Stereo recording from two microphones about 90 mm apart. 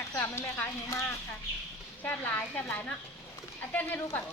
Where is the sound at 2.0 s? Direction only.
20° left (ahead or behind).